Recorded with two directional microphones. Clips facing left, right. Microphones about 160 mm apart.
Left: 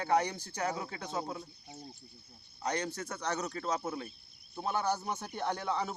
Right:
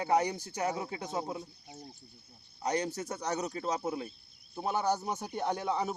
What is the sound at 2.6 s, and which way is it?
Speech, 20° right (ahead or behind).